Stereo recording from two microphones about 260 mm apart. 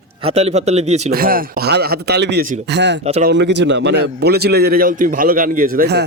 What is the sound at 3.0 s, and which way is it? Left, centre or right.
Speech, right.